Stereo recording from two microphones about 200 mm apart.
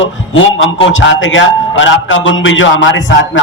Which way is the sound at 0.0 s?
75° left (ahead or behind).